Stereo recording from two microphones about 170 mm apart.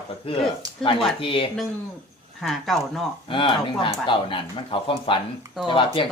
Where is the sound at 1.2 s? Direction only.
30° left (ahead or behind).